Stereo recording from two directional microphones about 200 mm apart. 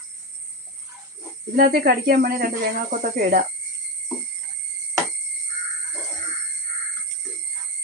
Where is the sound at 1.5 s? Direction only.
50° right (ahead or behind).